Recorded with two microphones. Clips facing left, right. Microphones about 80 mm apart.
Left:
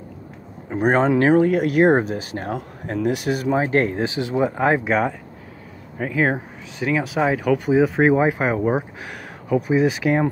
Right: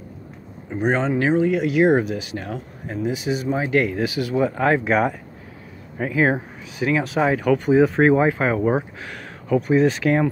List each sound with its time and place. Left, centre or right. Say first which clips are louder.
0.7 s speech: left 3 dB; left
2.9 s speech: left 2 dB; left
3.5 s speech: left 1 dB; left; by 4.8 s centre
4.8 s speech: right 1 dB; centre